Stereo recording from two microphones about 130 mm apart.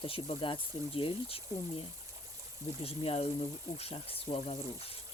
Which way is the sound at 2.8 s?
50° left (ahead or behind).